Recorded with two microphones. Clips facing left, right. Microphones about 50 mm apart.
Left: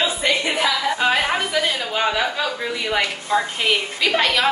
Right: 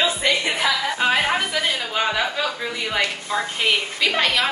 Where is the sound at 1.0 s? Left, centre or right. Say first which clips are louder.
Right 1 dB; centre.